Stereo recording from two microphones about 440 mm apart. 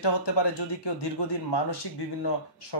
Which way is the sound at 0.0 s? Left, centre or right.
Left.